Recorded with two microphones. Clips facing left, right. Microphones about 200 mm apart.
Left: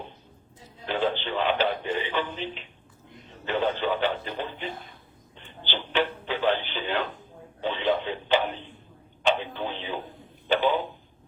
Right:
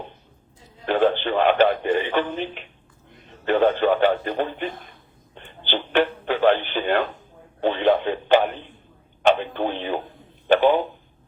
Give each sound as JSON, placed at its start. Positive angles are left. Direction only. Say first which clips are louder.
{"t": 0.9, "sound": "speech", "louder": "right 7 dB", "side_deg": -55}
{"t": 5.3, "sound": "telephone", "louder": "right 7 dB", "side_deg": -50}
{"t": 7.6, "sound": "speech", "louder": "right 7 dB", "side_deg": -55}